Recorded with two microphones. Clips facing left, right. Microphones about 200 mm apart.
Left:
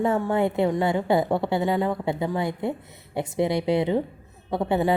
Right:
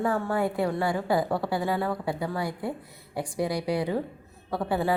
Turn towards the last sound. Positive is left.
turn(degrees=20)  # may be behind; listen again after turning